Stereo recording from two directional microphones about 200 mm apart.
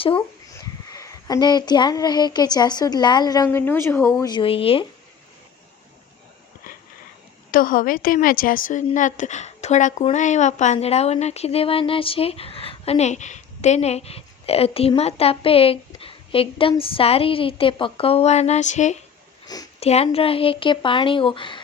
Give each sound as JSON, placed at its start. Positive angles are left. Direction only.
{"t": 0.6, "sound": "speech", "side_deg": 15}
{"t": 6.6, "sound": "a sound", "side_deg": 45}
{"t": 7.5, "sound": "a woman's voice", "side_deg": 45}